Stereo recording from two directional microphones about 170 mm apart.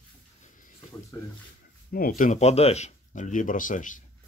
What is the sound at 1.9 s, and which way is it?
Speech, 55° left (ahead or behind).